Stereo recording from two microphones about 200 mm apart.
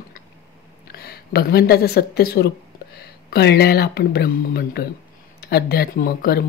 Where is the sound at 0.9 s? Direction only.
50° left (ahead or behind).